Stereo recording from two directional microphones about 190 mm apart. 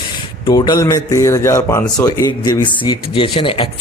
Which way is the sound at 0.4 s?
20° left (ahead or behind).